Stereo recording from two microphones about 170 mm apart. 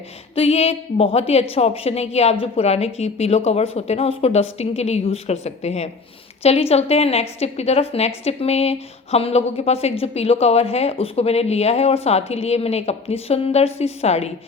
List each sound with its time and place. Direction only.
0.3 s a woman's voice: 35° left (ahead or behind)